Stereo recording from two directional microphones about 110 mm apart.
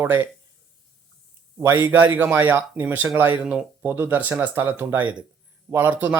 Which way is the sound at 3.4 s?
10° right (ahead or behind).